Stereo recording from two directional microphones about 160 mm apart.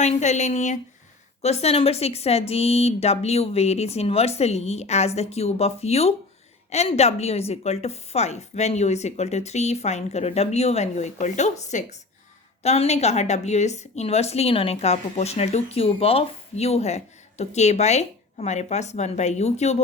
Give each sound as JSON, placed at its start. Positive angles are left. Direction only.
{"t": 0.0, "sound": "a woman's voice", "side_deg": 45}